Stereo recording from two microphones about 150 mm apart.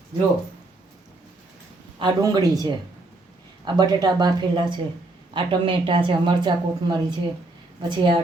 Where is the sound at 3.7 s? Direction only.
30° right (ahead or behind).